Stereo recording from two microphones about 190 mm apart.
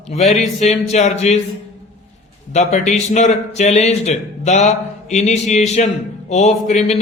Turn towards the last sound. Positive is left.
turn(degrees=40)  # may be behind; listen again after turning